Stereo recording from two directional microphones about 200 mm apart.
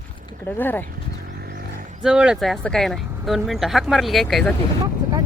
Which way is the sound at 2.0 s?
5° right (ahead or behind).